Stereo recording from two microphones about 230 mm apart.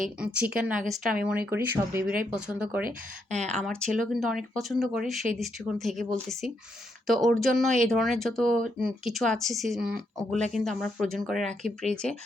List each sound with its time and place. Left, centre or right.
0.2 s speech: centre
2.8 s speech: right
3.4 s speech: centre